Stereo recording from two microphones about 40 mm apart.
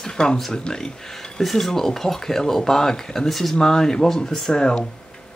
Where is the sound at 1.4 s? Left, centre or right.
Centre.